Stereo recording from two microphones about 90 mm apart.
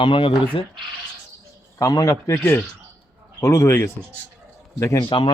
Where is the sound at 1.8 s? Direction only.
40° left (ahead or behind).